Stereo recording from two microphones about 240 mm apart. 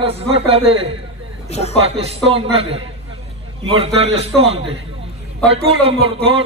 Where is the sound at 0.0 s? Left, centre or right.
Right.